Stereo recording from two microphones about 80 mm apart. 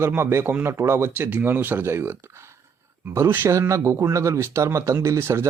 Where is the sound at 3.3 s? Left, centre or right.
Right.